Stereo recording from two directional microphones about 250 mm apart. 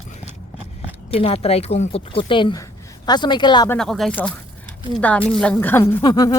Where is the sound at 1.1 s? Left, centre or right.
Left.